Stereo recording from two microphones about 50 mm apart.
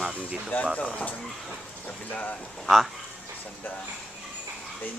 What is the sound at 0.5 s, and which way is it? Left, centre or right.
Speech, left.